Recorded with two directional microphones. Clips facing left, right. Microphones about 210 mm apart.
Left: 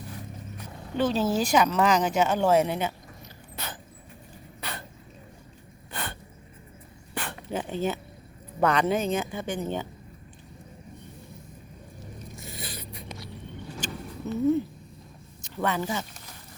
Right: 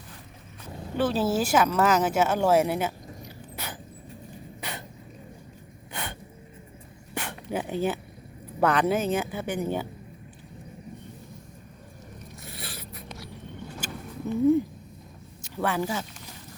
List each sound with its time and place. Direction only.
0.9 s speech: 5° right (ahead or behind)
3.5 s vehicle: 10° right (ahead or behind)
7.1 s dog: 10° right (ahead or behind)
8.6 s speech: 5° right (ahead or behind)
12.5 s a sound: centre (ahead or behind)
15.4 s speech: 5° right (ahead or behind)